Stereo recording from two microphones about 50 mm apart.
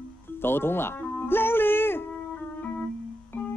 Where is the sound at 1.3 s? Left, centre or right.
Left.